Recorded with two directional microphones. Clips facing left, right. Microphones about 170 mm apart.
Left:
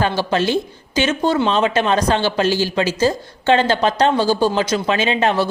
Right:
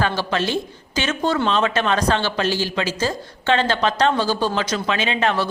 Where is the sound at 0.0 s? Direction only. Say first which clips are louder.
Left 3 dB; 35° left (ahead or behind).